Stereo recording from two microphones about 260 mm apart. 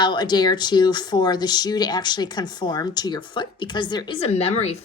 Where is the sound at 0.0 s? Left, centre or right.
Centre.